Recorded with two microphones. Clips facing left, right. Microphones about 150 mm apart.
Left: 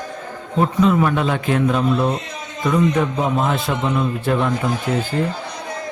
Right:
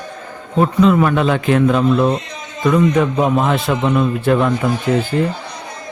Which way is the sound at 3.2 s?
85° right.